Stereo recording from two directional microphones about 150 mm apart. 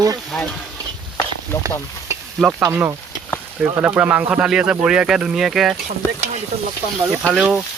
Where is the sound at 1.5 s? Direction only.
15° left (ahead or behind).